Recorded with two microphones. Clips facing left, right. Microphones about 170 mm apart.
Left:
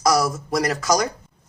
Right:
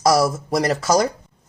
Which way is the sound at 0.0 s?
30° right (ahead or behind).